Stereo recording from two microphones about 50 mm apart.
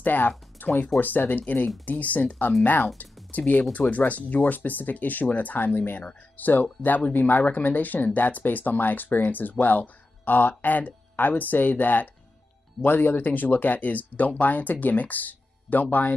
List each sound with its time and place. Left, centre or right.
0.0 s speech: left